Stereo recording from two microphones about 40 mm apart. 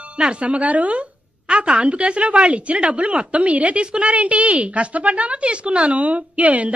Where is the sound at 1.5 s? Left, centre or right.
Right.